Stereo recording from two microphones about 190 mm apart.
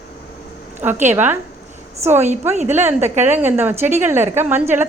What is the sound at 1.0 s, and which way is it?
A woman's voice, 10° right (ahead or behind).